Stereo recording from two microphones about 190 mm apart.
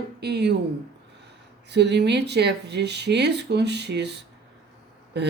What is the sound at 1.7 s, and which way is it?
Speech, 65° right (ahead or behind).